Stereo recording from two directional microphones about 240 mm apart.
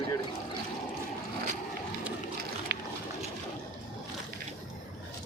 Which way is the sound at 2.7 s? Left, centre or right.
Right.